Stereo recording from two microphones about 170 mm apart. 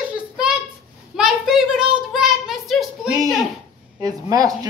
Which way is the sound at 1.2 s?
5° right (ahead or behind).